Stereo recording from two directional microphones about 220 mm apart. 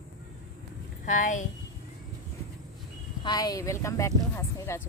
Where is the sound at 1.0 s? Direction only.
35° left (ahead or behind).